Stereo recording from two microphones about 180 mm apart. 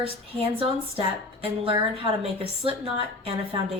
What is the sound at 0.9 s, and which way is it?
A woman's voice, 30° right (ahead or behind).